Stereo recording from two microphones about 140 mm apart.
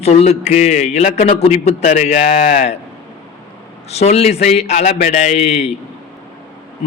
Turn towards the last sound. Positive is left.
turn(degrees=50)  # may be behind; listen again after turning